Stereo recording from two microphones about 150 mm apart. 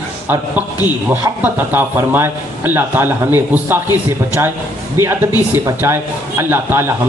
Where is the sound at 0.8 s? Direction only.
10° right (ahead or behind).